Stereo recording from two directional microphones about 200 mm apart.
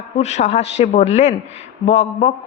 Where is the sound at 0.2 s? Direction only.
35° left (ahead or behind).